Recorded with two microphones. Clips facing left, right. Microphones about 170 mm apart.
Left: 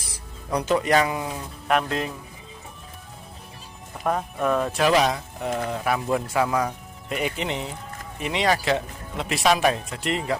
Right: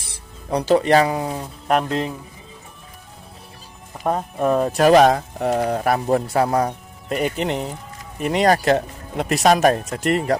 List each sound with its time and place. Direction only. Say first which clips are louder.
0.0 s speech: even; 30° right (ahead or behind)
4.0 s speech: right 4 dB; 30° right (ahead or behind)